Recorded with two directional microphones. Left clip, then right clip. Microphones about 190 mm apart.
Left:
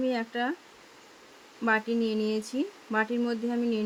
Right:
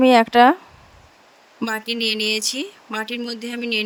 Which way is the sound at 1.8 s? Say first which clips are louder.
Right 8 dB; 55° right (ahead or behind).